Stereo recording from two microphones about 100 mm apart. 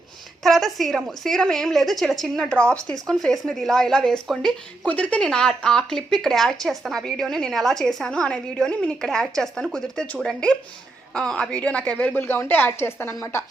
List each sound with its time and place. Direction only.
0.4 s a woman's voice: centre (ahead or behind); by 13.4 s 30° left (ahead or behind)